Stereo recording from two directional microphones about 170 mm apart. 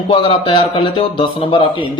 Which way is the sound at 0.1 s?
30° left (ahead or behind).